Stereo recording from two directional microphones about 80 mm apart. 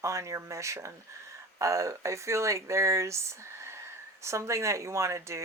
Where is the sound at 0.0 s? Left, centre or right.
Right.